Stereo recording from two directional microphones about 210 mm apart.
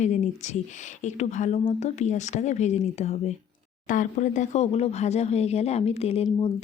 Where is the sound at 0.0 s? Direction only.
35° left (ahead or behind).